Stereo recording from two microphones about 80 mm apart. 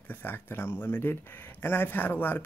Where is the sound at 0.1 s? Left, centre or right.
Left.